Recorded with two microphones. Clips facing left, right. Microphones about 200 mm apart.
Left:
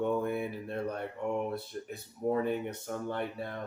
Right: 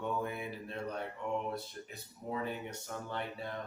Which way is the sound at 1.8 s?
50° left (ahead or behind).